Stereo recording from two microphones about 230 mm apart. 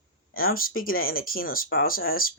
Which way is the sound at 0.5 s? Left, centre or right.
Left.